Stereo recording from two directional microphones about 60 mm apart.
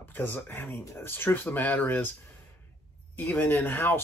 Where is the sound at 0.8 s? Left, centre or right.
Left.